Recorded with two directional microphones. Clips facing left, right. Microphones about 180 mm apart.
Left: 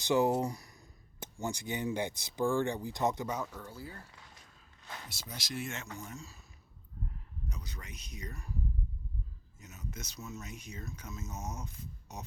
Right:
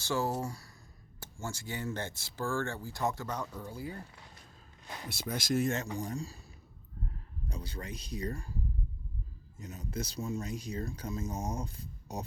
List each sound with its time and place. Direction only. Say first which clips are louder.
0.0 s speech: left 5 dB; 20° left (ahead or behind)
3.6 s speech: right 5 dB; 15° right (ahead or behind)
5.0 s speech: right 14 dB; 60° right (ahead or behind); by 6.4 s 35° right (ahead or behind)
7.4 s speech: right 6 dB; 30° right (ahead or behind)
9.6 s speech: right 7 dB; 30° right (ahead or behind)